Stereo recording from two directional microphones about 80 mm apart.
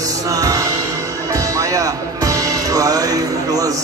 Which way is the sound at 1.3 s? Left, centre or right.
Right.